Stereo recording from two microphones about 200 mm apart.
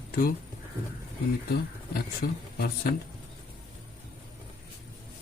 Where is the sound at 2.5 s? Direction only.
50° left (ahead or behind).